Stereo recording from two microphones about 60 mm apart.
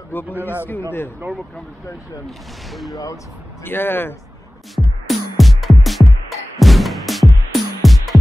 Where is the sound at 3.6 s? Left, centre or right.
Left.